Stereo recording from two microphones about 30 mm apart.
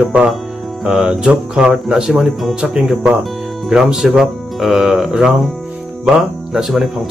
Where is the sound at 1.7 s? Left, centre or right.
Centre.